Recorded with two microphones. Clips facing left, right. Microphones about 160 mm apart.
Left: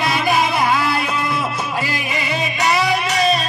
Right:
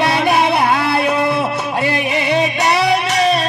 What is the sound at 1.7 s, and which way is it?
Music, 60° right (ahead or behind).